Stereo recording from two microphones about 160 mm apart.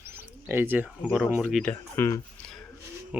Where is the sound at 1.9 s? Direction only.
15° left (ahead or behind).